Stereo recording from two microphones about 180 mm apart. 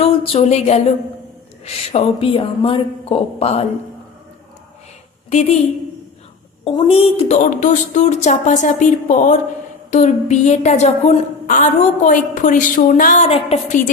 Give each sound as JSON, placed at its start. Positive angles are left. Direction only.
{"t": 0.0, "sound": "a sound", "side_deg": 35}
{"t": 1.6, "sound": "speech", "side_deg": 35}
{"t": 5.3, "sound": "speech", "side_deg": 35}
{"t": 6.7, "sound": "a woman's voice", "side_deg": 30}
{"t": 13.2, "sound": "speech", "side_deg": 35}